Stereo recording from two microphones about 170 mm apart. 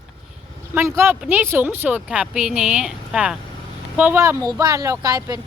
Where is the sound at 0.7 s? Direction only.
15° right (ahead or behind).